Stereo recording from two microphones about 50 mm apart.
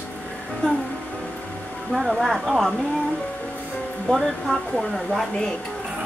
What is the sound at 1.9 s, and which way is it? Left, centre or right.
Speech, centre.